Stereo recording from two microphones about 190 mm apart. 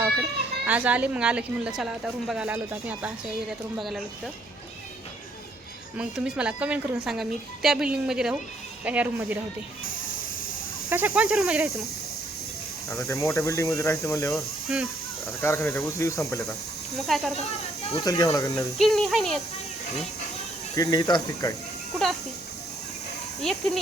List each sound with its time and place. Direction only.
0.6 s a woman's voice: 5° right (ahead or behind)
6.0 s a woman's voice: 5° right (ahead or behind)
10.8 s a woman's voice: 10° right (ahead or behind)
12.9 s speech: 15° left (ahead or behind)
14.3 s speech: 5° right (ahead or behind)
15.4 s speech: 15° left (ahead or behind)
17.0 s a woman's voice: centre (ahead or behind)
17.9 s speech: 20° left (ahead or behind)
18.8 s a woman's voice: centre (ahead or behind)
20.7 s speech: 20° left (ahead or behind)
23.4 s a woman's voice: centre (ahead or behind)